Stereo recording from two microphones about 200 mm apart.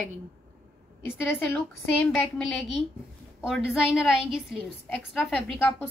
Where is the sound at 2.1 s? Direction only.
5° left (ahead or behind).